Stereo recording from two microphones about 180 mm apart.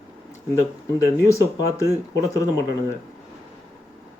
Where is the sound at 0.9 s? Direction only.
15° left (ahead or behind).